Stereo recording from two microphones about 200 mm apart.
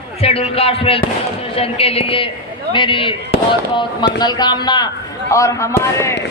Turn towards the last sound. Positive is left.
turn(degrees=15)  # may be behind; listen again after turning